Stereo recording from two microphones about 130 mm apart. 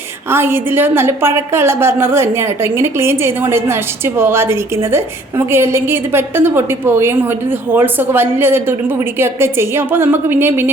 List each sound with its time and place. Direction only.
0.3 s a woman's voice: 20° right (ahead or behind)